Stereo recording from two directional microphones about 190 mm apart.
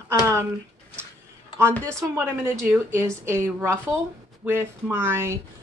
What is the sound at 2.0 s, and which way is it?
Speech, 15° right (ahead or behind).